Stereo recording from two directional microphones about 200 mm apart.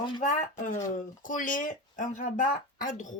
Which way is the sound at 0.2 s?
40° left (ahead or behind).